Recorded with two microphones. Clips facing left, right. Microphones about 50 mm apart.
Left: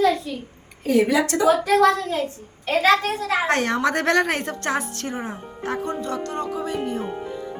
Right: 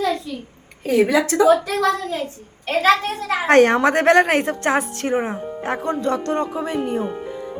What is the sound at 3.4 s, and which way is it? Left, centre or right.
A woman's voice, right.